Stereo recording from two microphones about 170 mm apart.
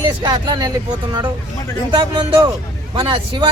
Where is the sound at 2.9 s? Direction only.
30° right (ahead or behind).